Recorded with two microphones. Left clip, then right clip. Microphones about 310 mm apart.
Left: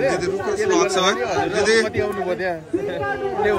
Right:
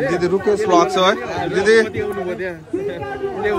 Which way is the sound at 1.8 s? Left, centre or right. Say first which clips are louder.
Left 1 dB; left.